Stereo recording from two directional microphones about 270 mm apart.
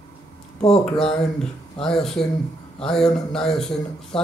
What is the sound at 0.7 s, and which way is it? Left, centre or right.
Speech, centre.